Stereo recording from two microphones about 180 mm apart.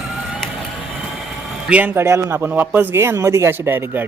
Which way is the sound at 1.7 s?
10° right (ahead or behind).